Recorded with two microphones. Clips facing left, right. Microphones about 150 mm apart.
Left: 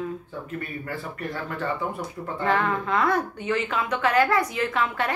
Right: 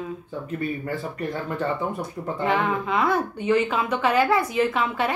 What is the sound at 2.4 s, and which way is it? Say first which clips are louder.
A woman's voice: even; 20° right (ahead or behind).